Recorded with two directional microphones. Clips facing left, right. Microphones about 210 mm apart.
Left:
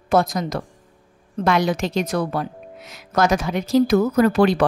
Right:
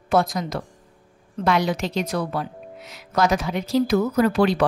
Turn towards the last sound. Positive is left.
turn(degrees=50)  # may be behind; listen again after turning